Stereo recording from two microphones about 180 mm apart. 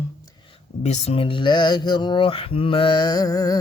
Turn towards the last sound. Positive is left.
turn(degrees=20)  # may be behind; listen again after turning